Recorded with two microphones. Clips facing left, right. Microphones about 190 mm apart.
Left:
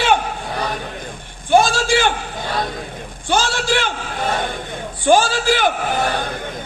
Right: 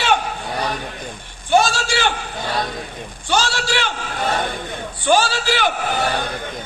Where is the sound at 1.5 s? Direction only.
50° left (ahead or behind).